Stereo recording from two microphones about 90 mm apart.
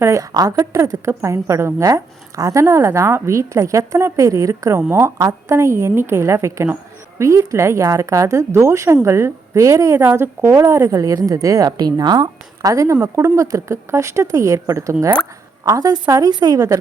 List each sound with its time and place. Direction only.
0.0 s a woman's voice: 35° right (ahead or behind)
5.1 s a woman's voice: 35° right (ahead or behind)
12.7 s a woman's voice: 35° right (ahead or behind)